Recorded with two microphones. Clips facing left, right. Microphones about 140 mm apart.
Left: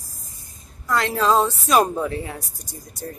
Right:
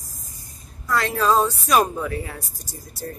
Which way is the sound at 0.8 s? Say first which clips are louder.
Left 1 dB; 20° left (ahead or behind).